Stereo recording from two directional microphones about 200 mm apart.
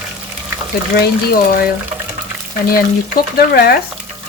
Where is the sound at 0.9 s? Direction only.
50° left (ahead or behind).